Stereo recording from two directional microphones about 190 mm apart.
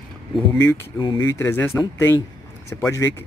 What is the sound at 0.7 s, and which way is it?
Speech, 20° left (ahead or behind).